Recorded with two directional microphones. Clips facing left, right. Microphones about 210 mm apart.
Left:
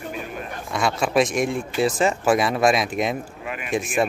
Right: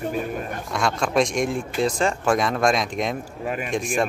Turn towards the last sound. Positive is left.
turn(degrees=5)  # may be behind; listen again after turning